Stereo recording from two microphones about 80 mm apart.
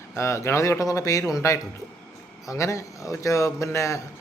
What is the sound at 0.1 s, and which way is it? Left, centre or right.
Speech, left.